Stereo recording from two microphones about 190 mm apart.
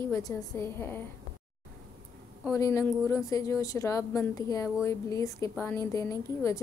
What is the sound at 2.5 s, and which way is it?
Speech, 15° left (ahead or behind).